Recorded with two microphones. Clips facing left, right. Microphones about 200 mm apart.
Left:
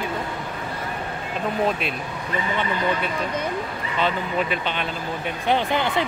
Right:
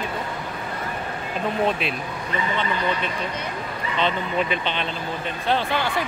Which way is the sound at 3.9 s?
10° left (ahead or behind).